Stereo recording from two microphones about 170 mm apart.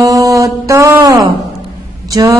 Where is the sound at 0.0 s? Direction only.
20° right (ahead or behind).